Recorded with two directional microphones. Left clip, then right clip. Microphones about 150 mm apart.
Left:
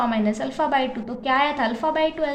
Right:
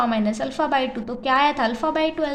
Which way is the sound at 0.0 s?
25° right (ahead or behind).